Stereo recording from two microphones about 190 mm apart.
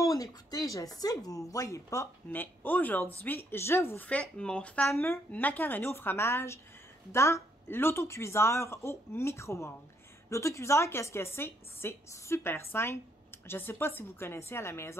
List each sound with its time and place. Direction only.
0.0 s speech: 20° left (ahead or behind)